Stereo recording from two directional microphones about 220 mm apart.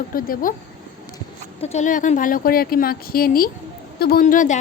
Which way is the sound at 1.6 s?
30° left (ahead or behind).